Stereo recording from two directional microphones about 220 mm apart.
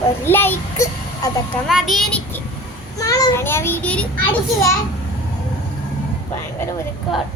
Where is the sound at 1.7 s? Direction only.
Centre (ahead or behind).